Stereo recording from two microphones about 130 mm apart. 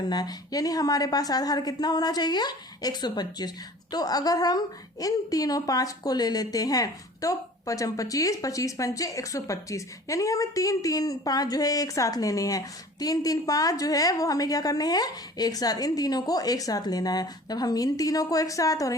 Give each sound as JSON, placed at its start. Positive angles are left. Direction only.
{"t": 0.1, "sound": "a woman's voice", "side_deg": 30}